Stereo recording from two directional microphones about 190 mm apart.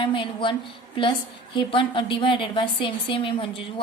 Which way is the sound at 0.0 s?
25° left (ahead or behind).